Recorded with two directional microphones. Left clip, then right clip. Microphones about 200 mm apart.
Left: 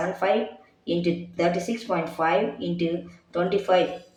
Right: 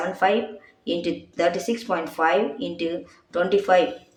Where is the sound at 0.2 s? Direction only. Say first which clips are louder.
Right 4 dB; 40° right (ahead or behind).